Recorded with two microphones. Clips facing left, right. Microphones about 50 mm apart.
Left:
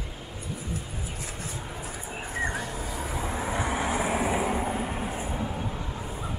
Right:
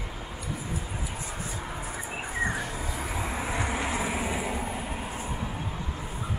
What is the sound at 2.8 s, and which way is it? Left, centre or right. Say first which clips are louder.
Vehicle: even; centre.